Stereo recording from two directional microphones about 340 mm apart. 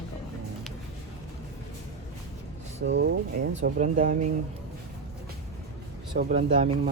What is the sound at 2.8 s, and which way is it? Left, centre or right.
Speech, right.